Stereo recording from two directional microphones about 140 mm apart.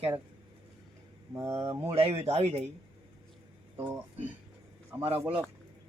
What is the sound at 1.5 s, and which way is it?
A man's voice, 45° right (ahead or behind).